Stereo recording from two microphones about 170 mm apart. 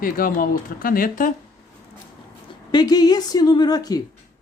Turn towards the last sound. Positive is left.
turn(degrees=25)  # may be behind; listen again after turning